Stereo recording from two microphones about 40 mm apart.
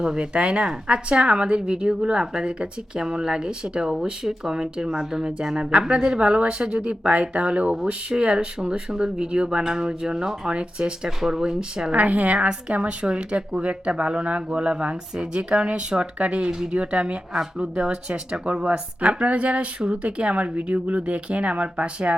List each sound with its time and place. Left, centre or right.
0.0 s speech: right
6.8 s speech: right
9.5 s speech: centre
11.9 s speech: right